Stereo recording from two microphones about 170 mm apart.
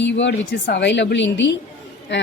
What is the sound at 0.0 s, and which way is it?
A woman's voice, 90° left.